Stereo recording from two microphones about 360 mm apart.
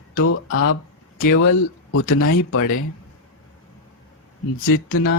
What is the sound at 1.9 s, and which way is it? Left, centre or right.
Speech, left.